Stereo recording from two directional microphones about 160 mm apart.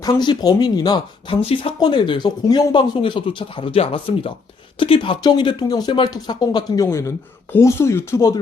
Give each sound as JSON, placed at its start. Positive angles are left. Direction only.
{"t": 0.0, "sound": "speech", "side_deg": 25}